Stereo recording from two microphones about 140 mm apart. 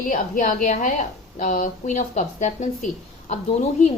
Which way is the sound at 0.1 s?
70° left (ahead or behind).